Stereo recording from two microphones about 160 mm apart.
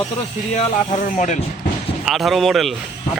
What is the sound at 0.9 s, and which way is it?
Speech, 50° left (ahead or behind).